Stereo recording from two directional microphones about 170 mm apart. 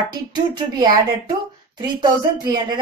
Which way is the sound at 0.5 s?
25° right (ahead or behind).